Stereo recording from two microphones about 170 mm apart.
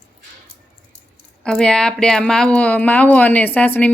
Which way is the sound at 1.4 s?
5° left (ahead or behind).